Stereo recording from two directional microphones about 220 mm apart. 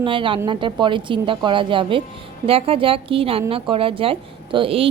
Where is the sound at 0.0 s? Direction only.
25° right (ahead or behind).